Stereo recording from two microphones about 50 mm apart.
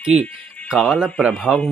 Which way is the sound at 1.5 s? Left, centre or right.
Left.